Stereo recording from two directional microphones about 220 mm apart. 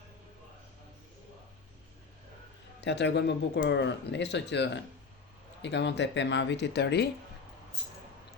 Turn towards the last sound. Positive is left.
turn(degrees=50)  # may be behind; listen again after turning